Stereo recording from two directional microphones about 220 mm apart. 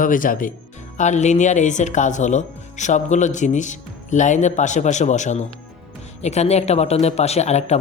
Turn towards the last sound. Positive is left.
turn(degrees=30)  # may be behind; listen again after turning